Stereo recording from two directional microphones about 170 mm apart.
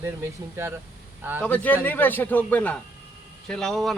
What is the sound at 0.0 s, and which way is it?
Speech, 15° right (ahead or behind).